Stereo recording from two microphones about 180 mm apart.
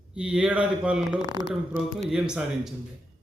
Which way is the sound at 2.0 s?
5° right (ahead or behind).